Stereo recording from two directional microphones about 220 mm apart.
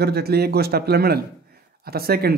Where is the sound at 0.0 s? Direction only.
45° right (ahead or behind).